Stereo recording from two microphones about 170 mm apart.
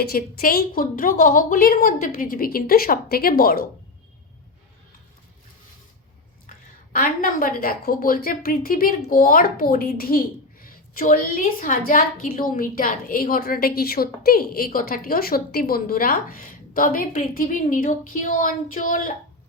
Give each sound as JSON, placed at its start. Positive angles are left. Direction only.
{"t": 0.0, "sound": "a woman's voice", "side_deg": 60}
{"t": 6.9, "sound": "a woman's voice", "side_deg": 55}